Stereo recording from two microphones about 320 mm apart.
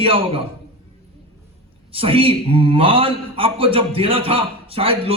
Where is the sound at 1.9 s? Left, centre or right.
Centre.